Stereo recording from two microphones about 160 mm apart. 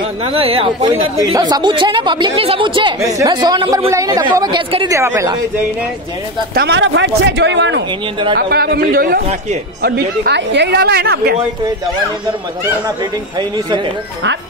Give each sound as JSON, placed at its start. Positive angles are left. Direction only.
{"t": 0.2, "sound": "speech", "side_deg": -35}
{"t": 1.1, "sound": "speech", "side_deg": -25}
{"t": 4.9, "sound": "speech", "side_deg": -20}
{"t": 6.5, "sound": "a woman's voice", "side_deg": -90}
{"t": 8.4, "sound": "a man's voice", "side_deg": -75}
{"t": 9.8, "sound": "a woman's voice", "side_deg": -80}